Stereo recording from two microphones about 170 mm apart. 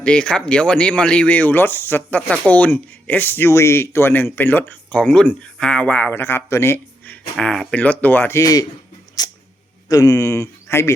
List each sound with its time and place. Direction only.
0.0 s speech: 5° left (ahead or behind)
9.2 s cat: 25° left (ahead or behind)
9.9 s speech: 20° left (ahead or behind)